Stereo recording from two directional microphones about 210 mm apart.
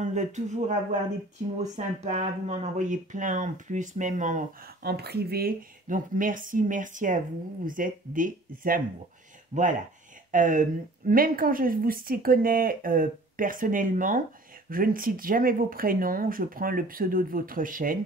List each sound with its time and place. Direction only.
0.0 s speech: 35° right (ahead or behind)
4.8 s a woman's voice: 50° right (ahead or behind)